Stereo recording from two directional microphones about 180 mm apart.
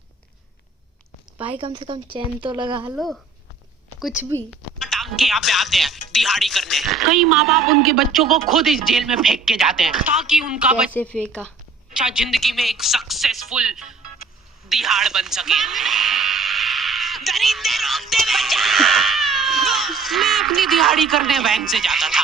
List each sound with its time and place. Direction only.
1.5 s speech: 30° right (ahead or behind)
2.9 s a woman's voice: centre (ahead or behind)
10.9 s speech: 5° left (ahead or behind)
14.7 s a sound: centre (ahead or behind)